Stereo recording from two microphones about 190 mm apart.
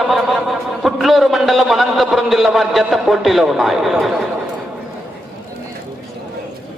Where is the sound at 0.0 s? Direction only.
Centre (ahead or behind).